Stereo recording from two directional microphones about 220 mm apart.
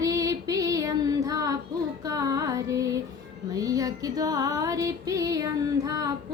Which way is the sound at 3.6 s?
15° right (ahead or behind).